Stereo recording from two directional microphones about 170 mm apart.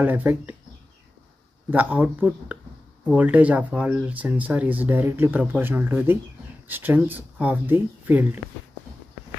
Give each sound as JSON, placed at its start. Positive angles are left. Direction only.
{"t": 0.0, "sound": "speech", "side_deg": -10}
{"t": 1.7, "sound": "speech", "side_deg": -10}